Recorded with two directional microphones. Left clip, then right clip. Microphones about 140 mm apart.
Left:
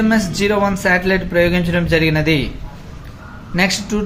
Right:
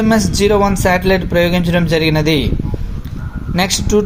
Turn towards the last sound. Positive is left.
turn(degrees=-35)  # may be behind; listen again after turning